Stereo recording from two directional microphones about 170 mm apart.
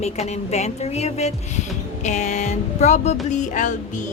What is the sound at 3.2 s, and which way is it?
Music, 45° left (ahead or behind).